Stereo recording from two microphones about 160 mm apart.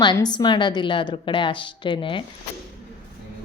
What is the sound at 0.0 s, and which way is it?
A woman's voice, 25° left (ahead or behind).